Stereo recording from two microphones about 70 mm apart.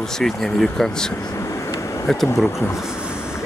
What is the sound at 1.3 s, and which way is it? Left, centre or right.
Vehicle, left.